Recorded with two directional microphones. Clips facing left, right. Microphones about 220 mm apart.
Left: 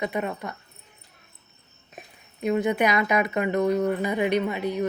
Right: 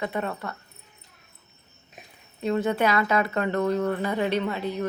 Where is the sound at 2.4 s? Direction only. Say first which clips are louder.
Left 1 dB; 15° left (ahead or behind).